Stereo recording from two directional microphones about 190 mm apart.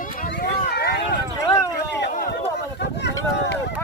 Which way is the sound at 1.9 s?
65° left (ahead or behind).